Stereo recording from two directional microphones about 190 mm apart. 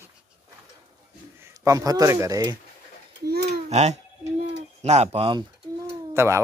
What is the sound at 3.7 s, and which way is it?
Speech, 35° right (ahead or behind).